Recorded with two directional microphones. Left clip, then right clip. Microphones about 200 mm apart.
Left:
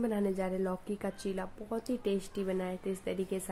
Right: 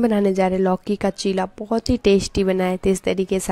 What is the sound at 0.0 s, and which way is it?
Speech, 50° right (ahead or behind).